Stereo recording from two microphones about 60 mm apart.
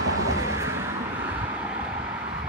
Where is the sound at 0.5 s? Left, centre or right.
Right.